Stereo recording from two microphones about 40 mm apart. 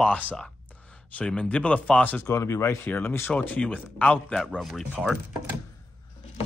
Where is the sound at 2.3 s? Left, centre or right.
Left.